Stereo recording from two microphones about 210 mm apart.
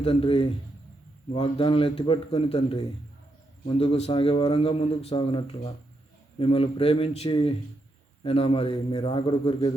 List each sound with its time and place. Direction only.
0.0 s a man's voice: 25° left (ahead or behind)